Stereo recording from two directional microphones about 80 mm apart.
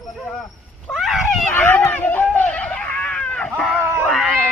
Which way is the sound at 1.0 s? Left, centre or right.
Centre.